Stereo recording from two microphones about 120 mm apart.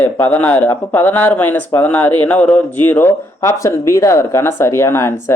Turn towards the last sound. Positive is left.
turn(degrees=25)  # may be behind; listen again after turning